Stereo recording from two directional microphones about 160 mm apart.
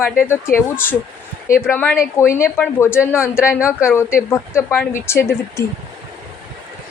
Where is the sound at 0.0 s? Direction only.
15° left (ahead or behind).